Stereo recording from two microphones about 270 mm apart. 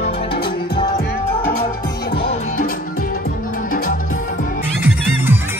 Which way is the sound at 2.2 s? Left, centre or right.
Left.